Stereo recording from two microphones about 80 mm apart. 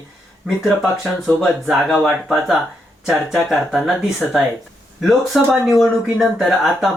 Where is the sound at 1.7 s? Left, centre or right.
Centre.